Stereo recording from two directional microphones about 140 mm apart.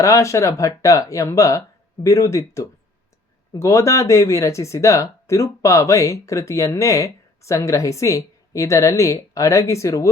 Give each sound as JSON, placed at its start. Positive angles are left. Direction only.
{"t": 0.0, "sound": "speech", "side_deg": 20}